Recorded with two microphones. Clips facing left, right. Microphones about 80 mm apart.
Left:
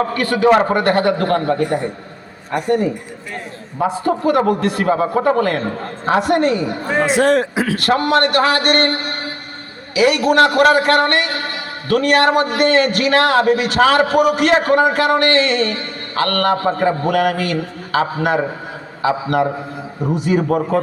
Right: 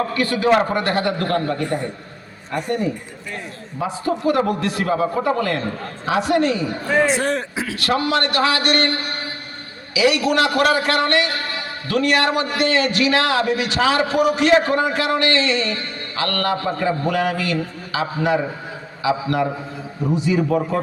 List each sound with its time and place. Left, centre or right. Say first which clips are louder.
0.1 s a man's voice: left 4 dB; left
3.8 s a man's voice: left 5 dB; left
7.1 s a man's voice: left 7 dB; left
7.5 s a man's voice: left 5 dB; left